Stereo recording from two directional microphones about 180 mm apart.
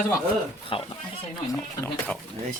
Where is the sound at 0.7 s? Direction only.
30° left (ahead or behind).